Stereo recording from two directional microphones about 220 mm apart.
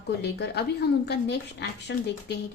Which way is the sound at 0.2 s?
50° left (ahead or behind).